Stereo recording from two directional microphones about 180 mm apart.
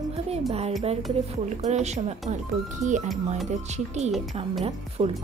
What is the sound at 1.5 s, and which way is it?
Speech, 40° right (ahead or behind).